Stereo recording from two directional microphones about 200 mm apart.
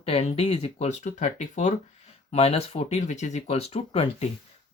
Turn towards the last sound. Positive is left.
turn(degrees=30)  # may be behind; listen again after turning